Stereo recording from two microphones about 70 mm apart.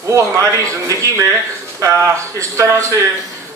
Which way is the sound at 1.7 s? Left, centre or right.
Right.